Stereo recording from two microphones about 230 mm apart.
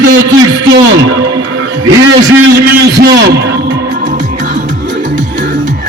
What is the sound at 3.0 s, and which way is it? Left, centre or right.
Speech, right.